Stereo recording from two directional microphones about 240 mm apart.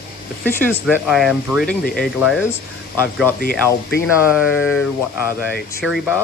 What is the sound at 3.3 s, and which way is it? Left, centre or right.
Speech, left.